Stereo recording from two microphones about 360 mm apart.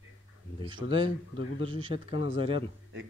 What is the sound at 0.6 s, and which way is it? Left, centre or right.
Speech, centre.